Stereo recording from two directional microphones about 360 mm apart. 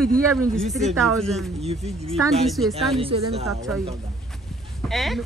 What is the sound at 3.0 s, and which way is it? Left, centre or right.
Speech, centre.